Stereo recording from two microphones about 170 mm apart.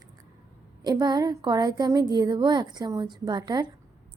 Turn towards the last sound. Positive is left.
turn(degrees=-25)  # may be behind; listen again after turning